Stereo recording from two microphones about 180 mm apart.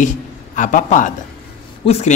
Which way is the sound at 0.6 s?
45° left (ahead or behind).